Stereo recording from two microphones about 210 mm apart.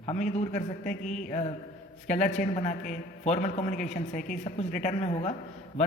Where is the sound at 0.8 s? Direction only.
5° left (ahead or behind).